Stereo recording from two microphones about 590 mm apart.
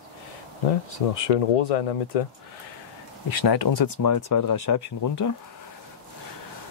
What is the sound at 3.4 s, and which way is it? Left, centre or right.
Speech, left.